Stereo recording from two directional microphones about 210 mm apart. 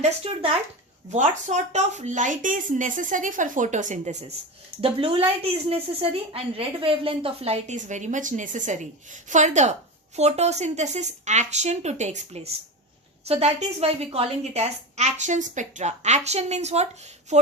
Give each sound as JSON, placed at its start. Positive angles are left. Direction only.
{"t": 0.0, "sound": "a woman's voice", "side_deg": -30}